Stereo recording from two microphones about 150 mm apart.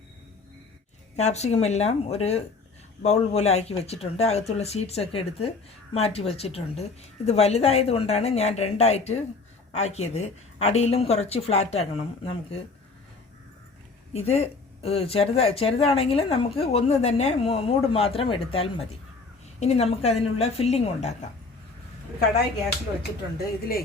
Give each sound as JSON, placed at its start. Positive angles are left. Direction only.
{"t": 1.1, "sound": "speech", "side_deg": 45}
{"t": 14.1, "sound": "speech", "side_deg": 45}